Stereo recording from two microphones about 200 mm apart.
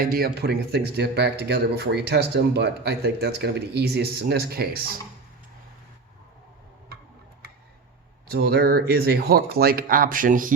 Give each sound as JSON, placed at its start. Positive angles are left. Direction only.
{"t": 0.0, "sound": "speech", "side_deg": -45}
{"t": 8.3, "sound": "speech", "side_deg": -50}